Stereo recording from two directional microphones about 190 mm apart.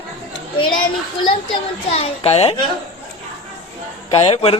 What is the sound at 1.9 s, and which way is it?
Speech, 35° left (ahead or behind).